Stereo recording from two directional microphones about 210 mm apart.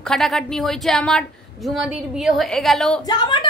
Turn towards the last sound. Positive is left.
turn(degrees=20)  # may be behind; listen again after turning